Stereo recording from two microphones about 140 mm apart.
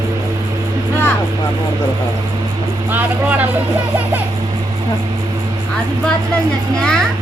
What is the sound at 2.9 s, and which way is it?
Vehicle, 15° right (ahead or behind).